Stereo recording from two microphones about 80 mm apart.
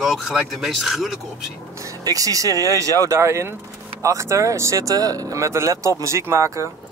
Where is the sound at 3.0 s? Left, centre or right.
Right.